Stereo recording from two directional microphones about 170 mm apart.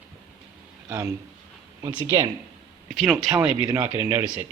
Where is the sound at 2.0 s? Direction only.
20° right (ahead or behind).